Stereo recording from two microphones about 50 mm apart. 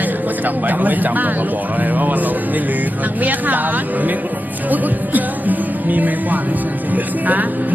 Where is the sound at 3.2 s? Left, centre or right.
Right.